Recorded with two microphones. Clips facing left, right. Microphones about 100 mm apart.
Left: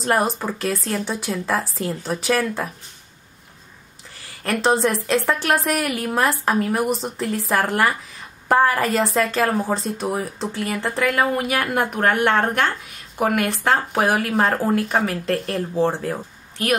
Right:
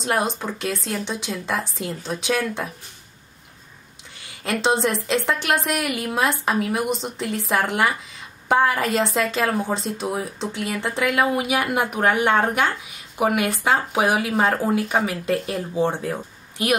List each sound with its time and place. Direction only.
0.0 s a woman's voice: centre (ahead or behind)
4.4 s a woman's voice: centre (ahead or behind)
16.6 s a woman's voice: 10° right (ahead or behind)